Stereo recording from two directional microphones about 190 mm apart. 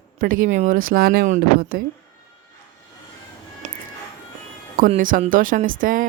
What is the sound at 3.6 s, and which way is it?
Music, 35° right (ahead or behind).